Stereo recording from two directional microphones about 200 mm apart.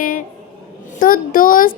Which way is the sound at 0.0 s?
45° left (ahead or behind).